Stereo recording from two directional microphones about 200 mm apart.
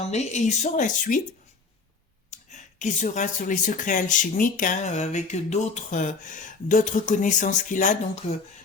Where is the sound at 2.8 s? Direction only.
35° left (ahead or behind).